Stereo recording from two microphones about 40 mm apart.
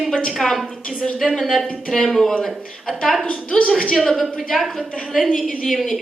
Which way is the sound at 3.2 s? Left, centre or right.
Left.